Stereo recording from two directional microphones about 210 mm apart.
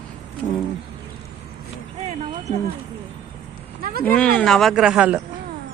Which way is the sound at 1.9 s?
30° right (ahead or behind).